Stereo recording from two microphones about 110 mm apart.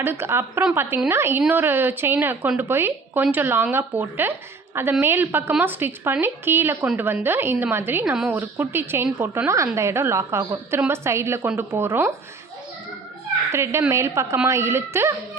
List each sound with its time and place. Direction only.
0.0 s a woman's voice: 20° right (ahead or behind)
13.5 s a woman's voice: 25° right (ahead or behind)